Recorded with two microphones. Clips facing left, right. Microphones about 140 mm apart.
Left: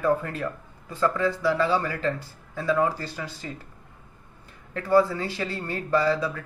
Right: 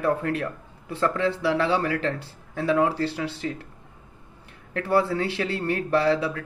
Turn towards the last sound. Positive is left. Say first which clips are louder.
# right 1 dB
turn(degrees=-70)  # may be behind; listen again after turning